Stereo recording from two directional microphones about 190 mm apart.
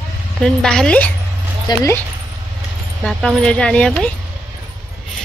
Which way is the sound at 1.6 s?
15° left (ahead or behind).